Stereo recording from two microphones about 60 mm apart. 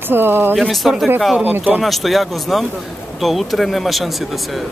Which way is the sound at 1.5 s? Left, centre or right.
Right.